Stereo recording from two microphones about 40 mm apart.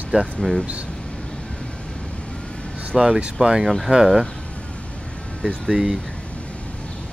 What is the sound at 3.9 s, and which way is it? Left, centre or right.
Speech, right.